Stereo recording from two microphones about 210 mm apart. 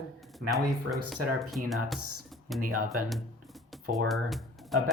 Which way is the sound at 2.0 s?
90° right.